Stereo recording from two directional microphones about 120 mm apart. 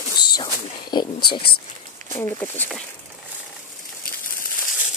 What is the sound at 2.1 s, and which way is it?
Speech, 20° left (ahead or behind).